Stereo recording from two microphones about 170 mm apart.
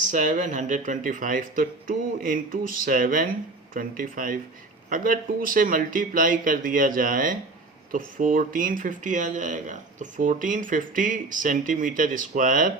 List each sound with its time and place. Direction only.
0.0 s speech: 50° right (ahead or behind)